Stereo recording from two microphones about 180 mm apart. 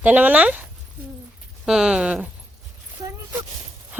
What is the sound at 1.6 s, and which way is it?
Speech, 5° right (ahead or behind).